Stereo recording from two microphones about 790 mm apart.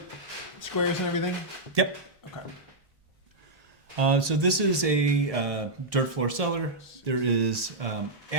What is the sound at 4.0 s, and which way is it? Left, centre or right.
Speech, right.